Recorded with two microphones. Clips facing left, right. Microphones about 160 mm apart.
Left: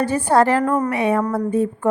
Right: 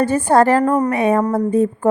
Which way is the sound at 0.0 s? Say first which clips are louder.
Right 3 dB; 45° right (ahead or behind).